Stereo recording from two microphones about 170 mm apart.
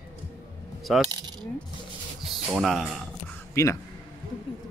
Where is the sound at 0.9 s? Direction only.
Centre (ahead or behind).